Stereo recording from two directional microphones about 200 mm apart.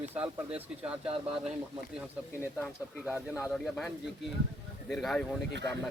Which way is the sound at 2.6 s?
Centre (ahead or behind).